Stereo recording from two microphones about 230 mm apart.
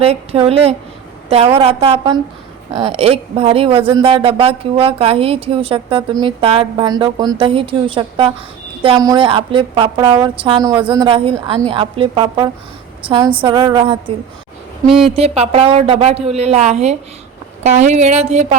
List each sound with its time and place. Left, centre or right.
0.0 s speech: right
15.1 s speech: right